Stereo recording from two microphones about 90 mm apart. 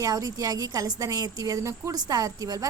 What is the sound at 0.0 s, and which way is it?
Speech, 40° right (ahead or behind).